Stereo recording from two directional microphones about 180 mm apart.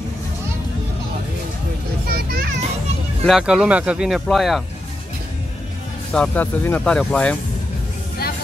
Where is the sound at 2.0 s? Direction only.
55° right (ahead or behind).